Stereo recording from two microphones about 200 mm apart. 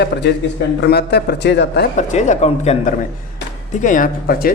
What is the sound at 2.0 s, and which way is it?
Speech, 35° left (ahead or behind).